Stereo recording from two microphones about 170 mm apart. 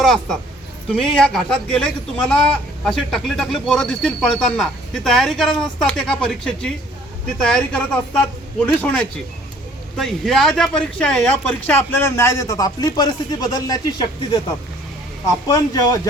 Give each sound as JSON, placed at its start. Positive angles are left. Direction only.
{"t": 0.0, "sound": "speech", "side_deg": 0}
{"t": 15.4, "sound": "a man's voice", "side_deg": 20}